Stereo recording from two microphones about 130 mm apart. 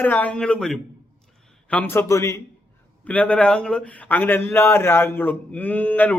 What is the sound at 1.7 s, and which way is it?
Speech, 15° left (ahead or behind).